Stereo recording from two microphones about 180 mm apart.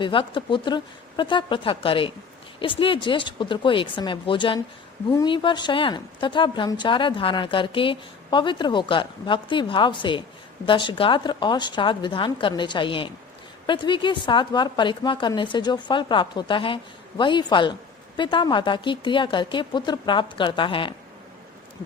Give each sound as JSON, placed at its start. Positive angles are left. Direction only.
{"t": 0.0, "sound": "a woman's voice", "side_deg": 25}